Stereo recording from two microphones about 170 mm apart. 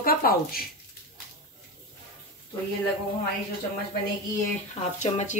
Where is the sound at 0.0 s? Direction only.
60° left (ahead or behind).